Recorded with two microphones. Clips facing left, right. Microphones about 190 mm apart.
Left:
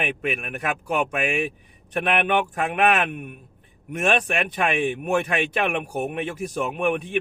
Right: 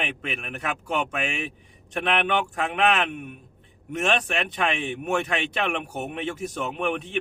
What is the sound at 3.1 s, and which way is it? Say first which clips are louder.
Speech: left 1 dB; 50° left (ahead or behind).